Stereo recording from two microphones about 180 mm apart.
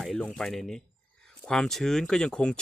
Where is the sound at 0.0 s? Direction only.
5° left (ahead or behind).